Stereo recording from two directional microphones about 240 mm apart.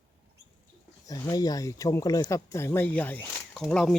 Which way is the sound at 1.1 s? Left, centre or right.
Centre.